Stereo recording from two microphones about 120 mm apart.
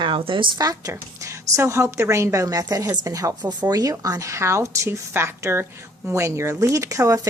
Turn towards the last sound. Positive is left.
turn(degrees=-25)  # may be behind; listen again after turning